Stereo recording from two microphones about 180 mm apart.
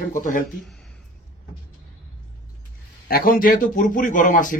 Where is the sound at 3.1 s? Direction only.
50° left (ahead or behind).